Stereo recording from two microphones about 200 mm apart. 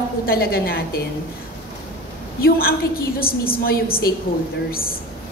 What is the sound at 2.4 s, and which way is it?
A woman's voice, 50° left (ahead or behind).